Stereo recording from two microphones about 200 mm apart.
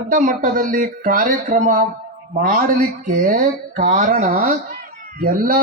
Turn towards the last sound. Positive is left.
turn(degrees=-45)  # may be behind; listen again after turning